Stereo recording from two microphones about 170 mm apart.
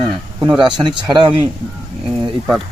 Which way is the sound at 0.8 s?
25° right (ahead or behind).